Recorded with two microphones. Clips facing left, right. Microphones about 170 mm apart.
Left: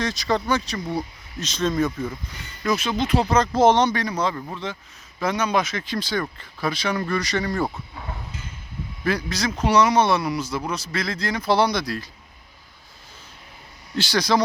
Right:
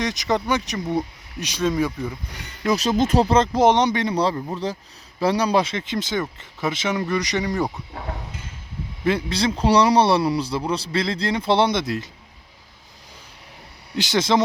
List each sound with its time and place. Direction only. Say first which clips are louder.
0.0 s speech: right 1 dB; 20° right (ahead or behind)
2.6 s speech: right 3 dB; 40° right (ahead or behind)
3.2 s speech: right 2 dB; 25° right (ahead or behind)
3.5 s speech: even; 15° right (ahead or behind)
9.0 s speech: right 3 dB; 25° right (ahead or behind)
13.9 s speech: right 1 dB; 20° right (ahead or behind)